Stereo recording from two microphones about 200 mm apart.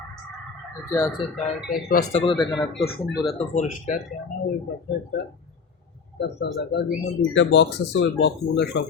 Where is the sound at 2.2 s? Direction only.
20° left (ahead or behind).